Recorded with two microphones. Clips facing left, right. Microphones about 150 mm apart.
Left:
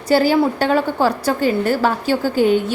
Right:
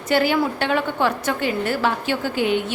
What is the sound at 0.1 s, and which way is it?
A woman's voice, 35° left (ahead or behind).